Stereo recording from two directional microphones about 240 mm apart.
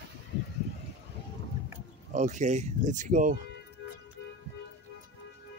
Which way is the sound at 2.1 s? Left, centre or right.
Right.